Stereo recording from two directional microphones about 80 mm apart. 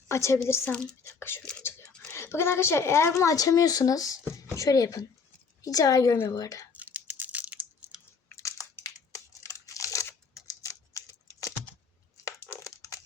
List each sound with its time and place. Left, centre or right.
0.1 s a woman's voice: left
0.7 s speech: centre
1.0 s a woman's voice: left
6.7 s a sound: right
8.4 s crushing: left
9.1 s computer keyboard: left
10.4 s typing: left
12.2 s crumpling: left